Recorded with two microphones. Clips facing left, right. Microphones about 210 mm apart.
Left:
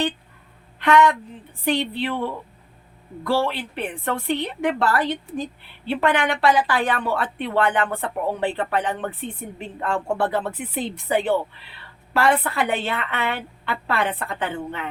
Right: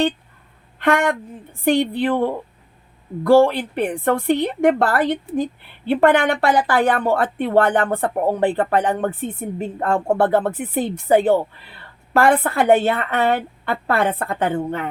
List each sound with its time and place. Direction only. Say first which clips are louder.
0.8 s a woman's voice: left 1 dB; 50° right (ahead or behind)